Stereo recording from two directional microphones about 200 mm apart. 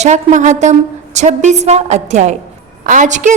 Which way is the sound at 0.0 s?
35° right (ahead or behind).